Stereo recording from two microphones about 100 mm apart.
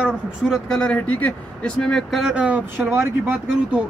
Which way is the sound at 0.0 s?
5° right (ahead or behind).